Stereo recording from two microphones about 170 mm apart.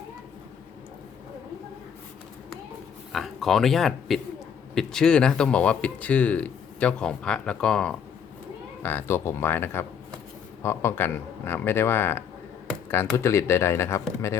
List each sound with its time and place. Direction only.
3.1 s speech: centre (ahead or behind)